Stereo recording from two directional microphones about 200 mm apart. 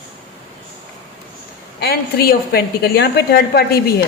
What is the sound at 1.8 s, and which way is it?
A woman's voice, 50° left (ahead or behind).